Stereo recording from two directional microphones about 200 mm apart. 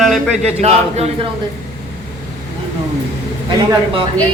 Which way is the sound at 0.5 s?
30° right (ahead or behind).